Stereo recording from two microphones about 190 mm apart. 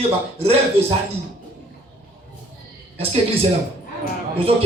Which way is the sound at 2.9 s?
30° right (ahead or behind).